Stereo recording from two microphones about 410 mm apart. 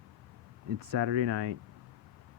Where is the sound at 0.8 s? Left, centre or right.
Right.